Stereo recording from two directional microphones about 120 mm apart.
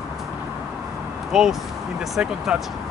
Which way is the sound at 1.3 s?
5° right (ahead or behind).